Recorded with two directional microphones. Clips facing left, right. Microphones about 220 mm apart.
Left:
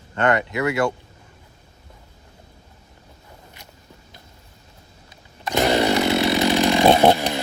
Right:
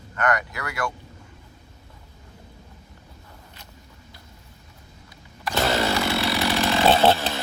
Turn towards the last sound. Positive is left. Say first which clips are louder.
# left 3 dB
turn(degrees=15)  # may be behind; listen again after turning